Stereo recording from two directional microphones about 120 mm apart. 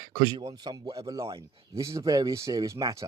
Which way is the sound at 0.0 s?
35° right (ahead or behind).